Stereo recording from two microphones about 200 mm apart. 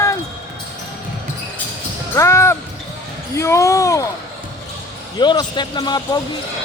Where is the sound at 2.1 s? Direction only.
15° left (ahead or behind).